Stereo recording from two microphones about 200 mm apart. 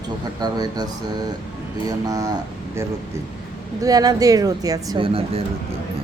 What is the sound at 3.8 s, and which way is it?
Speech, 20° right (ahead or behind).